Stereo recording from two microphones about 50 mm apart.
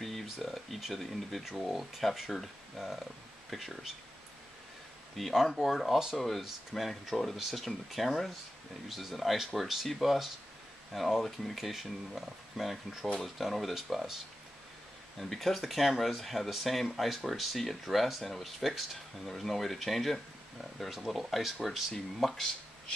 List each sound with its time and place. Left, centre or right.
0.0 s a sound: centre
1.7 s speech: centre
5.1 s speech: centre
6.1 s speech: centre